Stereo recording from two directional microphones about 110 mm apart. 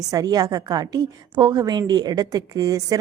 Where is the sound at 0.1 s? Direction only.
35° right (ahead or behind).